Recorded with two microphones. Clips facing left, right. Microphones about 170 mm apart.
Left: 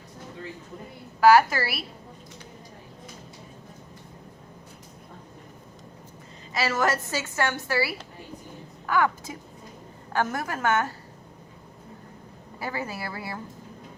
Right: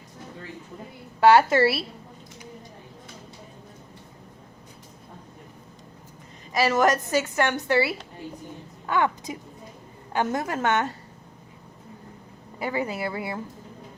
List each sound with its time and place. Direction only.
1.2 s a woman's voice: 25° right (ahead or behind)
6.5 s a woman's voice: 15° right (ahead or behind)
12.5 s a woman's voice: 20° right (ahead or behind)